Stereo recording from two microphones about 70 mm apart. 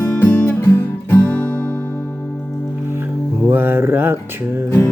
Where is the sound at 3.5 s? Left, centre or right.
Right.